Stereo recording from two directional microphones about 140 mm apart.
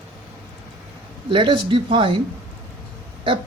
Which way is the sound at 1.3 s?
40° right (ahead or behind).